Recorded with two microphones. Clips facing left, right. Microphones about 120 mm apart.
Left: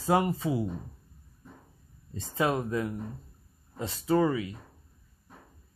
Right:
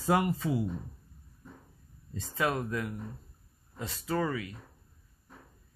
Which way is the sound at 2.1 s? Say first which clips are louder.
Left 3 dB; 25° left (ahead or behind).